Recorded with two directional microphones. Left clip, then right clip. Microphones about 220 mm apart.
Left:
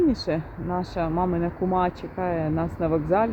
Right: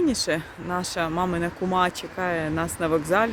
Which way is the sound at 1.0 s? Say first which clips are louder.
Left 2 dB; 20° right (ahead or behind).